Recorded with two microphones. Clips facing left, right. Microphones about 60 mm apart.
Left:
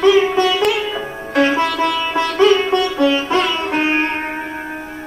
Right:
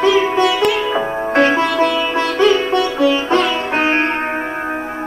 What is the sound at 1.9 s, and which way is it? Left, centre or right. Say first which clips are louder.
Sitar: right 1 dB; centre.